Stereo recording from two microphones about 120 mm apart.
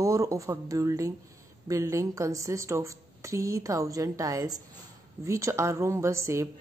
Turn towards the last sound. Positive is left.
turn(degrees=-25)  # may be behind; listen again after turning